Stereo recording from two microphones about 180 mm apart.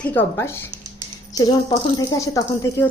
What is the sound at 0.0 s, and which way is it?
A woman's voice, 10° left (ahead or behind).